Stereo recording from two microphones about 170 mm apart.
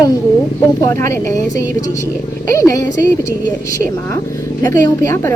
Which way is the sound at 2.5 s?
20° left (ahead or behind).